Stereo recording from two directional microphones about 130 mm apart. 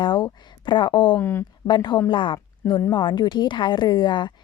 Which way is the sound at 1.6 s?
35° left (ahead or behind).